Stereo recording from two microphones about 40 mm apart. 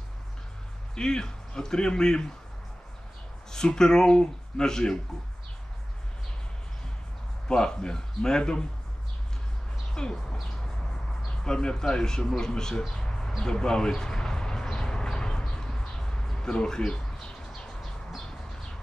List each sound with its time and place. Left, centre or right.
0.9 s speech: centre
3.6 s speech: centre
7.4 s speech: centre
10.0 s speech: centre
11.2 s speech: centre
12.8 s a sound: centre